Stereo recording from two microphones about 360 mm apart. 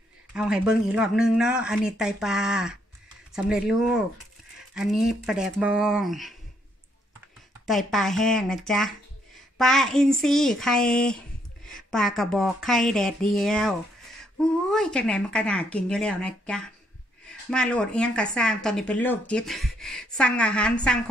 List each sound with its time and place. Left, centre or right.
0.3 s speech: centre
7.6 s speech: centre